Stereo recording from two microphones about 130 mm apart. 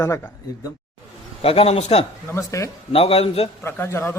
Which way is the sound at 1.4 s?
45° left (ahead or behind).